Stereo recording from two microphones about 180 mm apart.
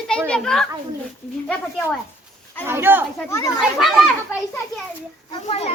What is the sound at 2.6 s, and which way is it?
Speech, 10° right (ahead or behind).